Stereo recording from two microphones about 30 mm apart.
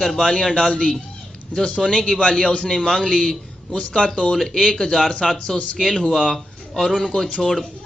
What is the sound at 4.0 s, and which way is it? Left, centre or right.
Speech, left.